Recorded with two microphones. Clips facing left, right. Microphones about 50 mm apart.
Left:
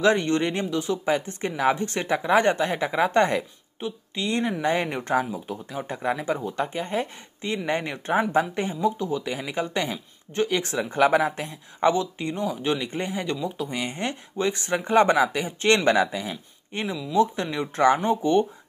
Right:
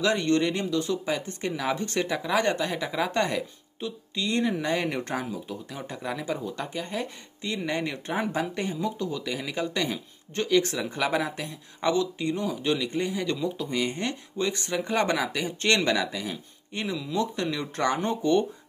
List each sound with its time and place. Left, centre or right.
0.0 s speech: left
10.7 s speech: left
16.9 s speech: centre
17.2 s speech: left